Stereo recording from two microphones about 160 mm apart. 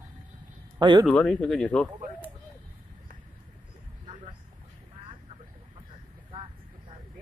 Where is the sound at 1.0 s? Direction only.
5° left (ahead or behind).